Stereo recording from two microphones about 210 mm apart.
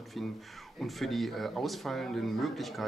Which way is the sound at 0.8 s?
Centre (ahead or behind).